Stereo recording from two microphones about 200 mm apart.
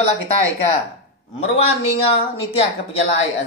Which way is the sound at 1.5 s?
30° left (ahead or behind).